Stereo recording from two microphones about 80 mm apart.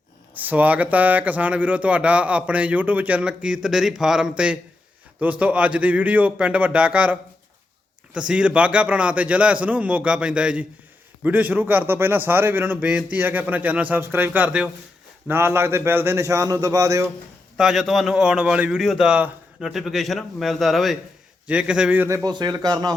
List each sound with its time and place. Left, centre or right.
0.4 s speech: centre
8.3 s a man's voice: centre
15.3 s a man's voice: right
17.6 s speech: centre
18.8 s a man's voice: centre
21.4 s speech: centre
22.3 s speech: right